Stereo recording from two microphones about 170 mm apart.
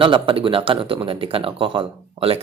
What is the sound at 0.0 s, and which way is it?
Speech, 30° right (ahead or behind).